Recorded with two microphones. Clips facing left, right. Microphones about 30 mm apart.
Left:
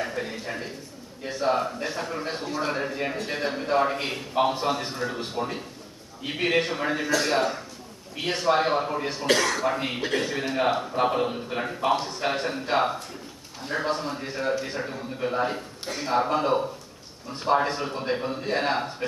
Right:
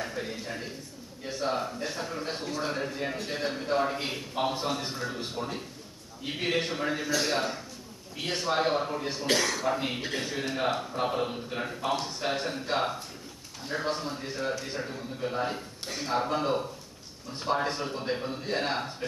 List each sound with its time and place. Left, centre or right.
0.0 s a man's voice: centre